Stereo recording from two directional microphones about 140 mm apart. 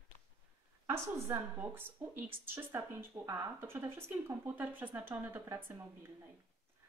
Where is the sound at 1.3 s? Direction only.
15° right (ahead or behind).